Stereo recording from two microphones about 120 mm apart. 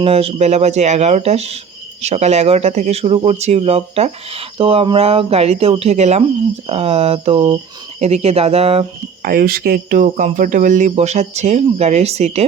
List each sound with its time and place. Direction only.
0.0 s speech: 55° right (ahead or behind); by 3.0 s 75° right (ahead or behind)
3.0 s speech: 55° right (ahead or behind)
9.9 s speech: 90° right; by 12.5 s 65° right (ahead or behind)